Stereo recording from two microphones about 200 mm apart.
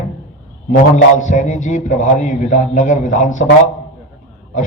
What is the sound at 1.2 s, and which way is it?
Speech, 40° left (ahead or behind).